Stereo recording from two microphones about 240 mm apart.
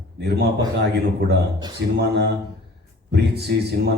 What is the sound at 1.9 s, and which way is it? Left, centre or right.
A man's voice, right.